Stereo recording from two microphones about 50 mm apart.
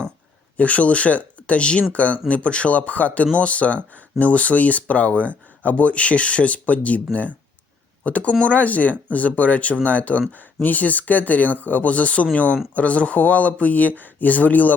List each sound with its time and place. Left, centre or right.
0.5 s speech: left